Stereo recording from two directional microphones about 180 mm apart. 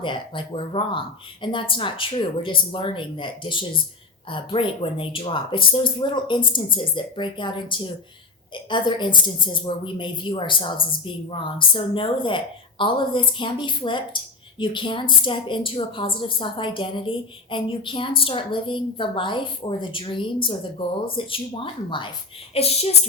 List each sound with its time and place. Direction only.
0.0 s a woman's voice: 30° left (ahead or behind)